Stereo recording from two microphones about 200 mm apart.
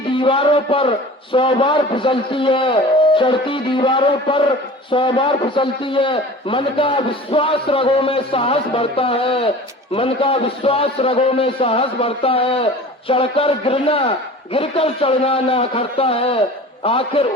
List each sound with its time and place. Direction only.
0.1 s a man's voice: 25° left (ahead or behind)